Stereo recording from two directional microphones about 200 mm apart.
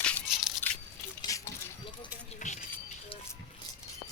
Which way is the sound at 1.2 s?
15° left (ahead or behind).